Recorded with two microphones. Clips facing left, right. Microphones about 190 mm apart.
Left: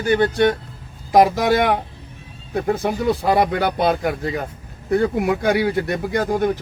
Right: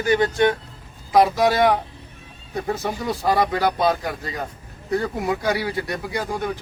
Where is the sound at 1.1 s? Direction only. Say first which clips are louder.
Left 2 dB; 55° left (ahead or behind).